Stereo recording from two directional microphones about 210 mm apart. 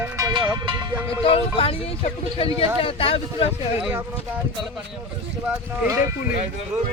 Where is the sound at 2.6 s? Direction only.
25° left (ahead or behind).